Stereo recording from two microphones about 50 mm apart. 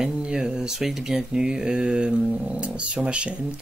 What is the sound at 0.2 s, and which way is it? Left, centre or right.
Speech, centre.